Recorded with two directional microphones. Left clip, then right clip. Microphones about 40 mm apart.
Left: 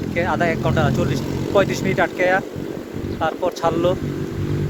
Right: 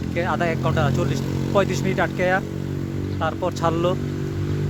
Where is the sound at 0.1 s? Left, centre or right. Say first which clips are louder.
Left 3 dB; right.